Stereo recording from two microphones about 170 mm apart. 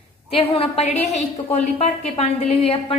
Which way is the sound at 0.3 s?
35° left (ahead or behind).